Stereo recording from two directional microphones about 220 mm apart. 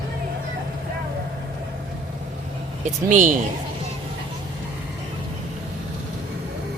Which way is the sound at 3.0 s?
35° right (ahead or behind).